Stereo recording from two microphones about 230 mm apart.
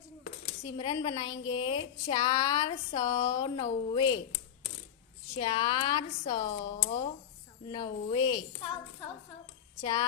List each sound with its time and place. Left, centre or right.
0.6 s speech: centre
1.3 s a woman's voice: left
1.6 s speech: centre
5.4 s speech: centre
9.8 s speech: centre